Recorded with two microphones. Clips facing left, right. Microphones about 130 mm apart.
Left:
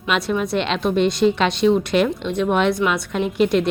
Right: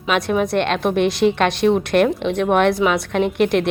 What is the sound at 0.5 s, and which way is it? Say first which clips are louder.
A woman's voice: right 2 dB; 55° right (ahead or behind).